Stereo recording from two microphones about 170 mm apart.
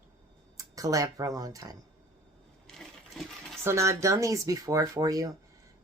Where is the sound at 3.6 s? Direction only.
15° right (ahead or behind).